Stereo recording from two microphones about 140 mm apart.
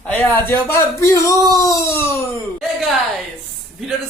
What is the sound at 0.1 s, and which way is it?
Speech, 10° left (ahead or behind).